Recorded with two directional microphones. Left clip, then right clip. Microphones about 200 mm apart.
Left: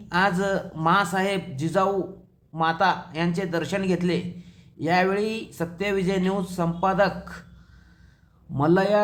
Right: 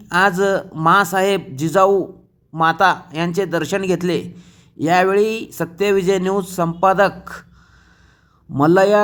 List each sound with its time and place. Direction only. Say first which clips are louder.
0.1 s speech: right 7 dB; 35° right (ahead or behind)
8.5 s speech: right 8 dB; 35° right (ahead or behind)